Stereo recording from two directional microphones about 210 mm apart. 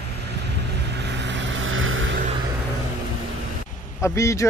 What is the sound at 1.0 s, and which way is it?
Vehicle, 55° right (ahead or behind).